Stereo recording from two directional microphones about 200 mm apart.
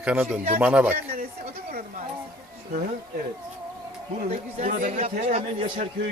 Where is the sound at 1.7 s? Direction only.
45° right (ahead or behind).